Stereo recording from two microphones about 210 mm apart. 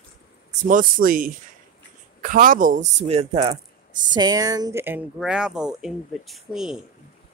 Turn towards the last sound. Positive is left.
turn(degrees=0)  # may be behind; listen again after turning